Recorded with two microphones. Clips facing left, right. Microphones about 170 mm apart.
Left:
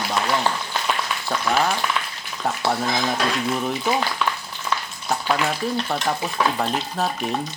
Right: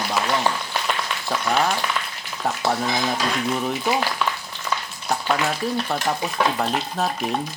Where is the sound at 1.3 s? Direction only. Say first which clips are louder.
Even; centre (ahead or behind).